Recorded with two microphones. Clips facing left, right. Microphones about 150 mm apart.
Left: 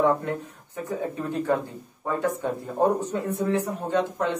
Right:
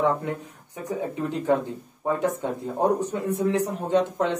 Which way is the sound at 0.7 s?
15° right (ahead or behind).